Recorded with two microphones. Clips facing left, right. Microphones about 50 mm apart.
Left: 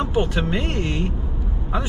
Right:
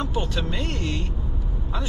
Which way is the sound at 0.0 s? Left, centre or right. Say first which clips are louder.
Left 6 dB; left.